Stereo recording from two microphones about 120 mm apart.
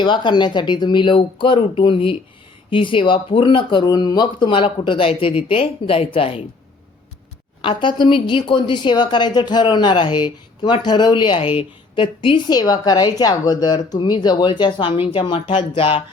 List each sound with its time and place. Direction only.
0.0 s a woman's voice: 40° left (ahead or behind)
7.6 s a woman's voice: 45° left (ahead or behind)